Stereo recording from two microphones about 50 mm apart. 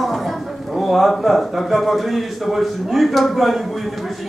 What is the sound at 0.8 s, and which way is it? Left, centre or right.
A man's voice, centre.